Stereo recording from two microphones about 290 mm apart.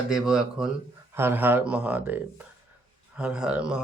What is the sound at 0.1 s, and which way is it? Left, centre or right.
Speech, centre.